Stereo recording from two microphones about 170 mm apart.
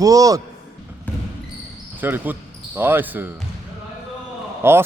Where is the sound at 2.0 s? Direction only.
10° right (ahead or behind).